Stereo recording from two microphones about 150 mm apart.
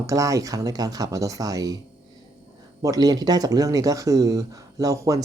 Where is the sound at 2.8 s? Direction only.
25° right (ahead or behind).